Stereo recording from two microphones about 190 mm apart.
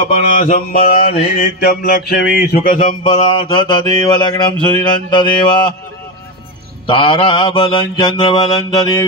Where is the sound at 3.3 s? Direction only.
25° left (ahead or behind).